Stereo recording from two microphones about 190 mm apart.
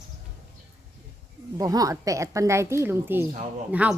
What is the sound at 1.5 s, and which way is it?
A woman's voice, 20° right (ahead or behind).